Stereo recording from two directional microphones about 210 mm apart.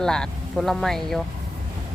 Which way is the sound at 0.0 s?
5° left (ahead or behind).